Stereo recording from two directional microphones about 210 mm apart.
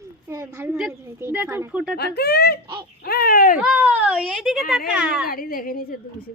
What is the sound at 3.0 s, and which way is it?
Speech, 45° left (ahead or behind).